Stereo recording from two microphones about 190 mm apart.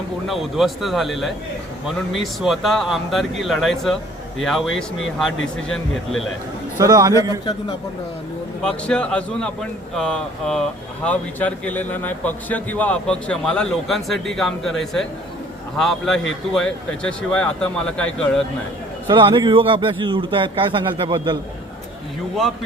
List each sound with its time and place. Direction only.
0.3 s speech: centre (ahead or behind)
6.7 s a man's voice: 20° right (ahead or behind)
8.6 s speech: 5° left (ahead or behind)
19.1 s a man's voice: 25° right (ahead or behind)